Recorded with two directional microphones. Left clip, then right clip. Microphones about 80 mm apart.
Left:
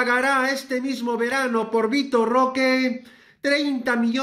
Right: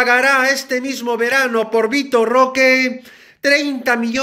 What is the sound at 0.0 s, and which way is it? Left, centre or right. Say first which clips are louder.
Speech: right 7 dB; left.